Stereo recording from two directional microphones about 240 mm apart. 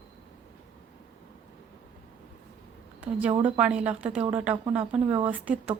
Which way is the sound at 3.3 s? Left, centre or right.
Right.